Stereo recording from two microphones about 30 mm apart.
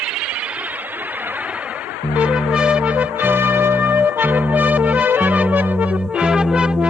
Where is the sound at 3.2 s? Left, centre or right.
Right.